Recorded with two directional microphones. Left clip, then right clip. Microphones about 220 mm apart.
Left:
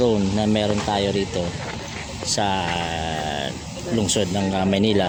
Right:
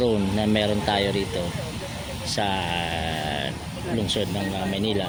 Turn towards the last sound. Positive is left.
turn(degrees=25)  # may be behind; listen again after turning